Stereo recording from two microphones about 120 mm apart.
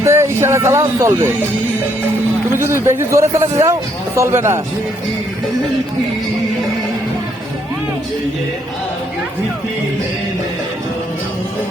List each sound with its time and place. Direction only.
0.0 s speech: 20° right (ahead or behind)
2.5 s speech: 20° right (ahead or behind)